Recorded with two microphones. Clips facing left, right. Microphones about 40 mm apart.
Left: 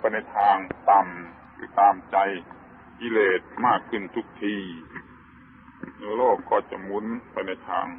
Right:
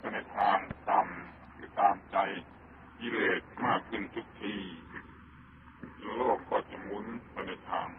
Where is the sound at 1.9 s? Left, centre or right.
Centre.